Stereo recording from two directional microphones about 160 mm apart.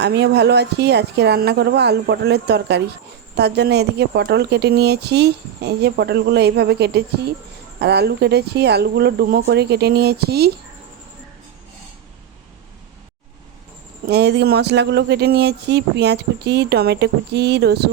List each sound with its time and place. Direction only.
0.0 s a woman's voice: 90° right
14.1 s a woman's voice: 90° right